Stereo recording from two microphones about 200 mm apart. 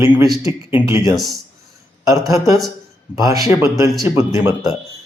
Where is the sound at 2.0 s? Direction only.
15° right (ahead or behind).